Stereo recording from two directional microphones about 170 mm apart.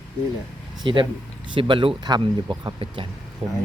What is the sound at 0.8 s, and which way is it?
Speech, 30° right (ahead or behind).